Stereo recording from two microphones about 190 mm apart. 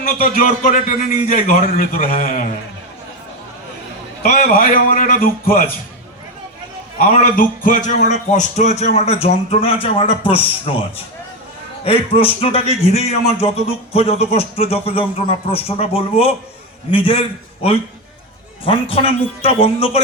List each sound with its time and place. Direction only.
0.0 s a man's voice: 45° left (ahead or behind)
4.2 s a man's voice: 50° left (ahead or behind)
7.0 s a man's voice: 45° left (ahead or behind)
11.9 s a man's voice: 30° left (ahead or behind)